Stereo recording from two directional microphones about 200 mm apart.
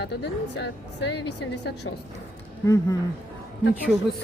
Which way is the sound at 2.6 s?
15° left (ahead or behind).